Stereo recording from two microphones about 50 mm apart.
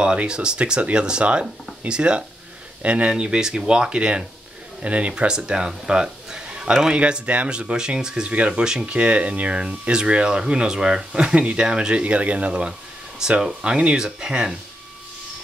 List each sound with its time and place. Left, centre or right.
0.0 s a man's voice: centre